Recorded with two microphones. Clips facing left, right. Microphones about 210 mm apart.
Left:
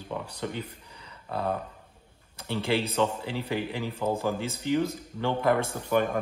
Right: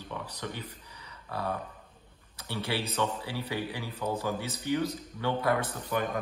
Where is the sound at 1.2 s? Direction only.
25° left (ahead or behind).